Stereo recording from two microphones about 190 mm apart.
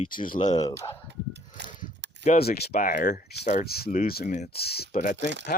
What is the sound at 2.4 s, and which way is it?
Speech, 55° left (ahead or behind).